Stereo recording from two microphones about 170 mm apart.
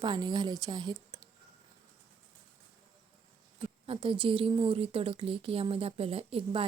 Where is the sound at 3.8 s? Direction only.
30° right (ahead or behind).